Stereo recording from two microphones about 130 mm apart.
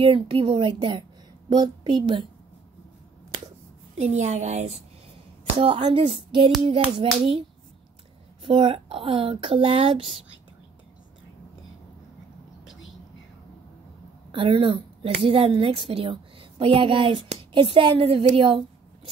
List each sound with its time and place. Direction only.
0.0 s a child's voice: 45° right (ahead or behind)
4.0 s a woman's voice: 60° right (ahead or behind)
5.6 s a child's voice: 40° right (ahead or behind)
8.5 s speech: 40° right (ahead or behind)
14.3 s a woman's voice: 40° right (ahead or behind)